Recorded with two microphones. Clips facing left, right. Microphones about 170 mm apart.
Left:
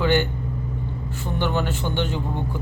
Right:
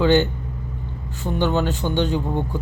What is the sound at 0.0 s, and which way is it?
Speech, 15° right (ahead or behind).